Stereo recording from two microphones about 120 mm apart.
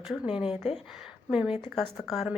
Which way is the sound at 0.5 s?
55° left (ahead or behind).